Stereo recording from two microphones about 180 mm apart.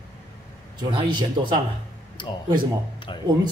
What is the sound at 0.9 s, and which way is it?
Speech, 25° right (ahead or behind).